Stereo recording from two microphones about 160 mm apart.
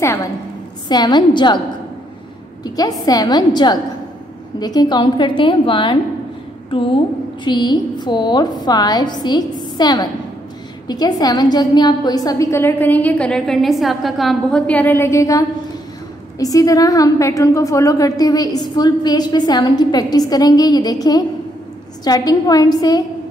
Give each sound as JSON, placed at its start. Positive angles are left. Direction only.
{"t": 0.0, "sound": "a woman's voice", "side_deg": 15}
{"t": 2.6, "sound": "a woman's voice", "side_deg": 25}